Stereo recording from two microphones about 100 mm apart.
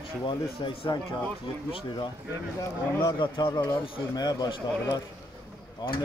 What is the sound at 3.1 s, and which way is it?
Speech, 55° left (ahead or behind).